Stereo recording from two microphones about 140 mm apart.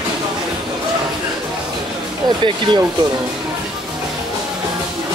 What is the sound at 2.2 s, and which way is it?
Speech, 35° right (ahead or behind).